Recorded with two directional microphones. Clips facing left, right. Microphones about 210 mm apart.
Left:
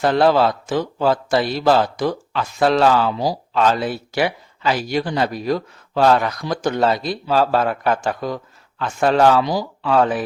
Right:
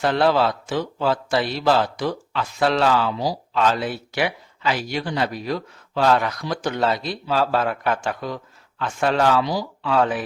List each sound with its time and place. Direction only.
0.0 s speech: 40° left (ahead or behind)